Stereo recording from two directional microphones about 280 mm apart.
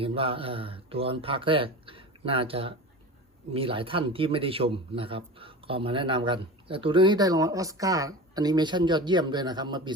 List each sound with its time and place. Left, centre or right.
0.0 s speech: centre